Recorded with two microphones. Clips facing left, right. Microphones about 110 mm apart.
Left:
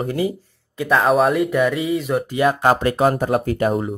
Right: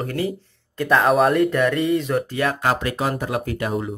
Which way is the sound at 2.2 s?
15° left (ahead or behind).